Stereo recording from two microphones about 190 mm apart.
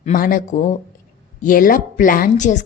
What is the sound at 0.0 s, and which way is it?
A woman's voice, 45° left (ahead or behind).